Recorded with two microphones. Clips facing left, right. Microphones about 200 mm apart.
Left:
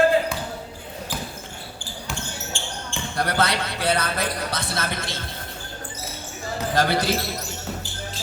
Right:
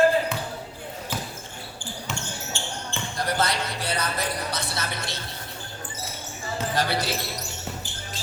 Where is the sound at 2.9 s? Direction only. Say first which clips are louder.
Left 3 dB; 65° left (ahead or behind); by 5.2 s 90° left.